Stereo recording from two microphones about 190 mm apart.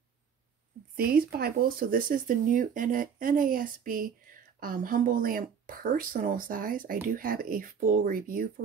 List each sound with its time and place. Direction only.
0.9 s speech: 50° right (ahead or behind)